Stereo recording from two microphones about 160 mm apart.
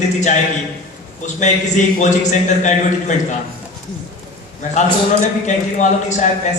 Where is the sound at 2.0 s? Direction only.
50° left (ahead or behind).